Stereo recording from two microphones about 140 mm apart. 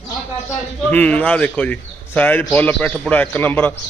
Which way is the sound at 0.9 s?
10° left (ahead or behind).